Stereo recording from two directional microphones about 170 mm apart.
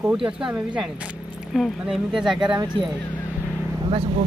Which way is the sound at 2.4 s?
25° right (ahead or behind).